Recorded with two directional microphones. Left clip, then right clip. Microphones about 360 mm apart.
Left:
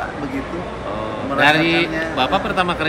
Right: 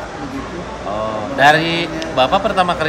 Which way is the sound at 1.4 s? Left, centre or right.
Right.